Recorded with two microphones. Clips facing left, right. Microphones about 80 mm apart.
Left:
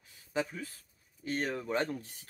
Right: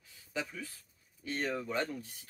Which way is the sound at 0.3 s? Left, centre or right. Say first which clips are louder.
Left 5 dB; left.